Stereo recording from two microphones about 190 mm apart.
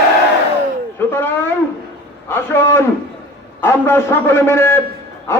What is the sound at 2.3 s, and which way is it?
A man's voice, 15° left (ahead or behind).